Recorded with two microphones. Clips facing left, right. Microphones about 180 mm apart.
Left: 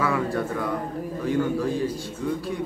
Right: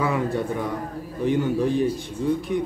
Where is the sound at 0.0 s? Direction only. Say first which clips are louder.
Right 1 dB; 20° right (ahead or behind).